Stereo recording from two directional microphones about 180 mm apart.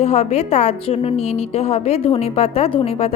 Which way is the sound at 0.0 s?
35° left (ahead or behind).